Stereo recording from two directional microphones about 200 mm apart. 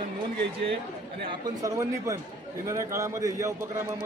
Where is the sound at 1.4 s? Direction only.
15° right (ahead or behind).